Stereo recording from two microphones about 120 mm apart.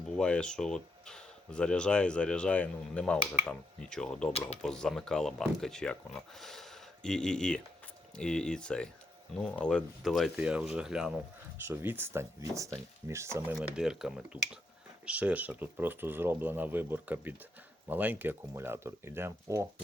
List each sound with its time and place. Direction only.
0.2 s speech: 10° left (ahead or behind)
4.3 s speech: 60° left (ahead or behind)
4.6 s speech: 5° left (ahead or behind)
11.7 s speech: 20° right (ahead or behind)
13.6 s speech: 5° right (ahead or behind); by 19.6 s 20° right (ahead or behind)